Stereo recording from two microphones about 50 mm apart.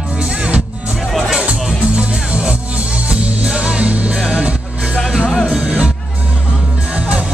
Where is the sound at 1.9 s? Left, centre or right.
Right.